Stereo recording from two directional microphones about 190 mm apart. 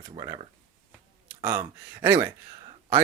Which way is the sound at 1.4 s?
15° right (ahead or behind).